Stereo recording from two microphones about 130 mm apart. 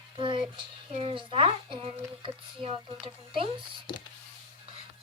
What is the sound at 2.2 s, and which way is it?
Speech, 40° right (ahead or behind).